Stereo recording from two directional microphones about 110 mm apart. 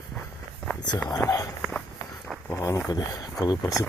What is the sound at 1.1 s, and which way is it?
Speech, 30° left (ahead or behind).